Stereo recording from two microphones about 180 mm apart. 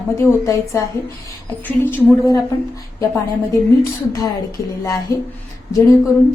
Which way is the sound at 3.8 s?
20° left (ahead or behind).